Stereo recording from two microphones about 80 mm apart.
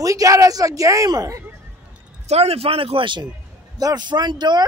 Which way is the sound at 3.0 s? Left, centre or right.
Right.